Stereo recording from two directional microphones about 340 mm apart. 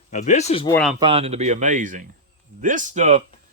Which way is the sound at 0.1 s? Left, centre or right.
Left.